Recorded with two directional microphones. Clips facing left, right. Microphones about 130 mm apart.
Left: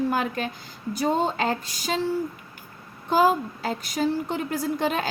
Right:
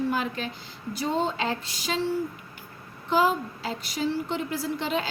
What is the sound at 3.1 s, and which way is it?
A woman's voice, 45° left (ahead or behind).